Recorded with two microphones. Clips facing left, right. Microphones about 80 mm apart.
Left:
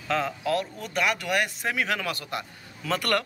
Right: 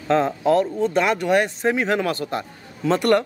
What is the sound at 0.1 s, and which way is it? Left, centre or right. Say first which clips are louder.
A man's voice: right 8 dB; right.